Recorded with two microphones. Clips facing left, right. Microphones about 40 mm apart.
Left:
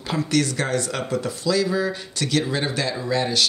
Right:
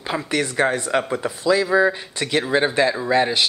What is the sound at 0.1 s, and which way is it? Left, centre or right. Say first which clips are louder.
Speech: left 1 dB; right.